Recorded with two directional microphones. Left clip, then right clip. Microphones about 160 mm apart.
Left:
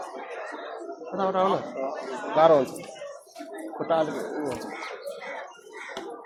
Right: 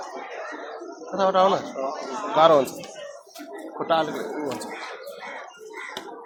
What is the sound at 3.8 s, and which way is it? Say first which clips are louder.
Speech: right 2 dB; 15° left (ahead or behind).